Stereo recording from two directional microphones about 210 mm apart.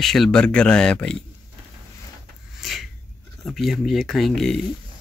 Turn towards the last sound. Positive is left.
turn(degrees=0)  # may be behind; listen again after turning